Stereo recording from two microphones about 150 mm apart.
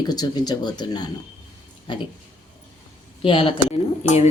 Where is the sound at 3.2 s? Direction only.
35° left (ahead or behind).